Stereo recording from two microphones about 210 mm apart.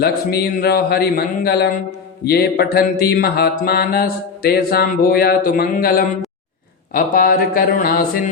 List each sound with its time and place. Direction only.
0.0 s mantra: 45° left (ahead or behind)